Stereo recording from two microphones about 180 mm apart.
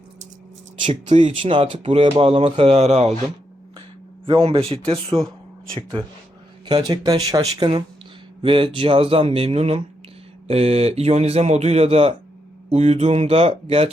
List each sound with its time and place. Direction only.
0.8 s speech: 25° right (ahead or behind)
4.3 s speech: 30° right (ahead or behind)
6.7 s speech: 25° right (ahead or behind)